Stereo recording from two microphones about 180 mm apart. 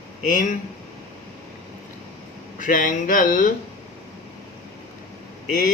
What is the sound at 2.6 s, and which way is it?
Speech, 50° left (ahead or behind).